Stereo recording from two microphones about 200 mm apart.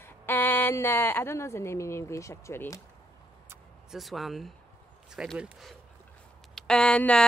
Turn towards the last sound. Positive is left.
turn(degrees=5)  # may be behind; listen again after turning